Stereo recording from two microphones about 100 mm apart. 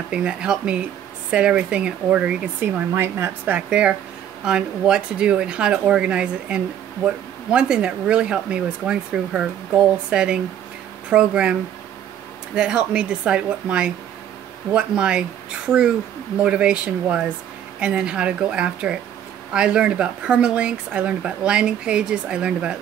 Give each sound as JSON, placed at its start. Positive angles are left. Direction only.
{"t": 0.1, "sound": "speech", "side_deg": -10}
{"t": 2.9, "sound": "speech", "side_deg": -25}
{"t": 3.5, "sound": "speech", "side_deg": -10}
{"t": 12.5, "sound": "speech", "side_deg": -10}